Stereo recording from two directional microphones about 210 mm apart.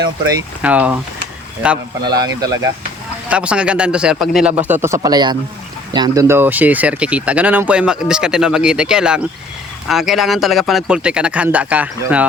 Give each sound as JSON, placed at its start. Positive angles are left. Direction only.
{"t": 0.6, "sound": "speech", "side_deg": -5}
{"t": 2.0, "sound": "speech", "side_deg": -20}
{"t": 3.2, "sound": "speech", "side_deg": -5}